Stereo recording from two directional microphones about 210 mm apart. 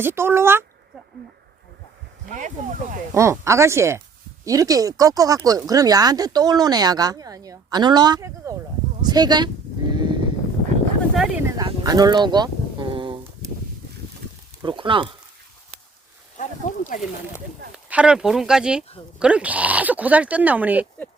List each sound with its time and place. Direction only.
0.0 s speech: 10° right (ahead or behind)
2.3 s speech: 35° right (ahead or behind)
3.2 s speech: 15° right (ahead or behind)
9.0 s sheep: 20° right (ahead or behind)
11.1 s a sound: centre (ahead or behind)
11.5 s a sound: 20° right (ahead or behind)
14.6 s speech: 25° right (ahead or behind)
16.4 s speech: 35° left (ahead or behind)
17.8 s speech: 5° right (ahead or behind)